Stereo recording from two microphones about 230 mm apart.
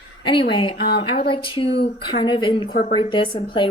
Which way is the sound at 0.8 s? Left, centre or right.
Left.